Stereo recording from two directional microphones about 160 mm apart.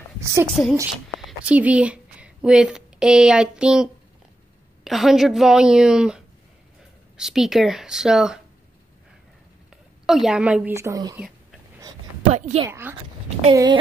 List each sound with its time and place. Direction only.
0.2 s a woman's voice: 20° right (ahead or behind)
0.5 s a woman's voice: centre (ahead or behind)
10.0 s a woman's voice: centre (ahead or behind); by 11.1 s 20° right (ahead or behind)
12.4 s a woman's voice: 50° right (ahead or behind)
12.6 s a woman's voice: 15° right (ahead or behind)
13.5 s speech: 30° right (ahead or behind)